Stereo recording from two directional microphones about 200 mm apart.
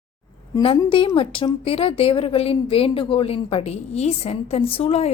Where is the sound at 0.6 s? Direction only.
25° left (ahead or behind).